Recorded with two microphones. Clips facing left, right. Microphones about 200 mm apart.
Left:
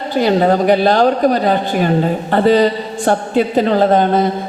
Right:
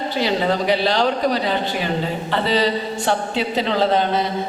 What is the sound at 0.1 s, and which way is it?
A woman's voice, 50° left (ahead or behind).